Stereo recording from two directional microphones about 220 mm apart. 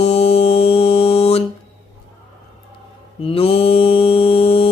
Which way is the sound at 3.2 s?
25° left (ahead or behind).